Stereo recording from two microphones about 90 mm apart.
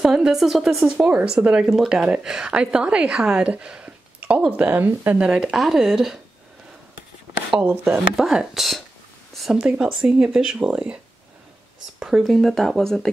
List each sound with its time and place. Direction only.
0.0 s a woman's voice: 5° right (ahead or behind)
5.3 s speech: 5° right (ahead or behind)
7.5 s speech: 20° right (ahead or behind)
8.0 s speech: 5° right (ahead or behind)
9.6 s a woman's voice: 10° right (ahead or behind)
12.0 s speech: 5° right (ahead or behind)